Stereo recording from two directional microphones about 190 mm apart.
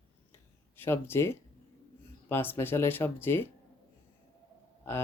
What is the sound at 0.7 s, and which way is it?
Speech, 10° left (ahead or behind).